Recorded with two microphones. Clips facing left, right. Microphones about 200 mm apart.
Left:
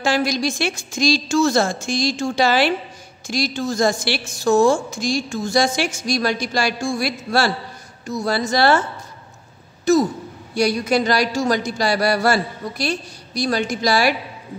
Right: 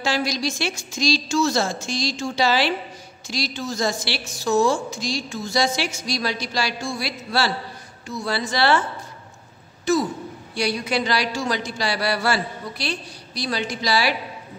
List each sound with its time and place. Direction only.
0.0 s a woman's voice: 50° left (ahead or behind)
9.9 s a sound: 40° left (ahead or behind)
10.5 s a woman's voice: 45° left (ahead or behind)